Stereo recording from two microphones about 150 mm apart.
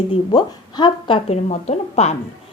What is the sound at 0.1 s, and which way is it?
A woman's voice, 30° left (ahead or behind).